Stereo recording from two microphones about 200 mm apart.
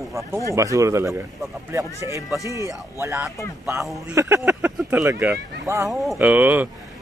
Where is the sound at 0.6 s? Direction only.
15° right (ahead or behind).